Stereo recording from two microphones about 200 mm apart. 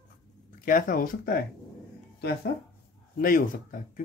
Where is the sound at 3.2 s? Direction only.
45° left (ahead or behind).